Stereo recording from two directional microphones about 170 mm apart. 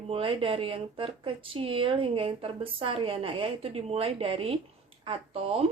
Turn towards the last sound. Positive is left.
turn(degrees=-35)  # may be behind; listen again after turning